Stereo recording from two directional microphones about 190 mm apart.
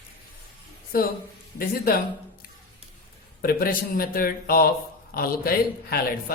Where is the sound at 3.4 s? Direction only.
50° left (ahead or behind).